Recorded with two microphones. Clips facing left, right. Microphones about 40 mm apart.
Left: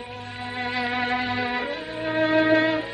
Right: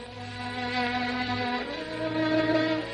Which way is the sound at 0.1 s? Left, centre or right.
Left.